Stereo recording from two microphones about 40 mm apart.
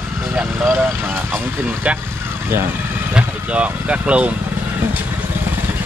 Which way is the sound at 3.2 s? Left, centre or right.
Right.